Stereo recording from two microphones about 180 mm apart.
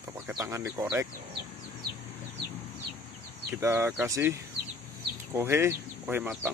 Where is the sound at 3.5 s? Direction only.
15° right (ahead or behind).